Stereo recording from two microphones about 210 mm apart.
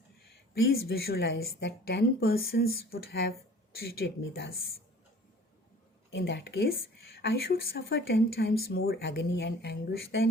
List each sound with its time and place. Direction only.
0.7 s speech: 45° left (ahead or behind)
6.1 s speech: 55° left (ahead or behind)